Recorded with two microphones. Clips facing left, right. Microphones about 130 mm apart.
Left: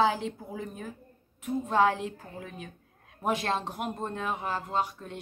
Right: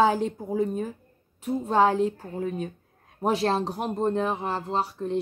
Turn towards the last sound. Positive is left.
turn(degrees=-30)  # may be behind; listen again after turning